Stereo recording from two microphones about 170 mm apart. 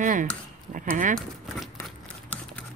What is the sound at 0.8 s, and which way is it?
Speech, 50° right (ahead or behind).